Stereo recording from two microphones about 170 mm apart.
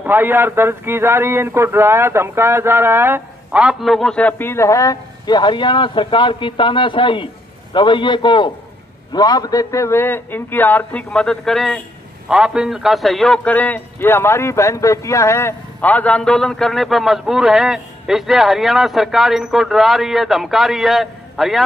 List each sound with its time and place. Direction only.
0.0 s a man's voice: 10° right (ahead or behind)